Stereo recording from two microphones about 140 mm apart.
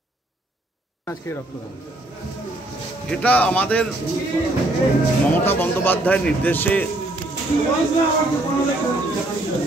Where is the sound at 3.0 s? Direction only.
10° left (ahead or behind).